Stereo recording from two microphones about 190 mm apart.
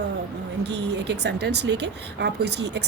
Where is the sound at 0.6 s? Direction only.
65° right (ahead or behind).